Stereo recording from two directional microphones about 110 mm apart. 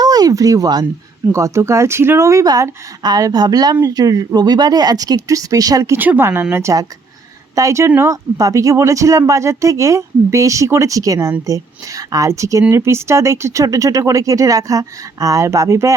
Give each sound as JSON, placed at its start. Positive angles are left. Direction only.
{"t": 0.0, "sound": "a sound", "side_deg": -35}
{"t": 1.3, "sound": "speech", "side_deg": -25}
{"t": 6.0, "sound": "speech", "side_deg": -20}